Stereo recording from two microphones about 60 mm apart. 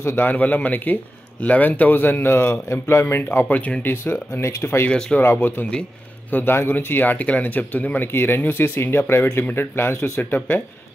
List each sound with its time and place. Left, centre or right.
0.0 s a man's voice: left
3.3 s a man's voice: left
3.8 s speech: left
4.9 s speech: centre
5.6 s speech: left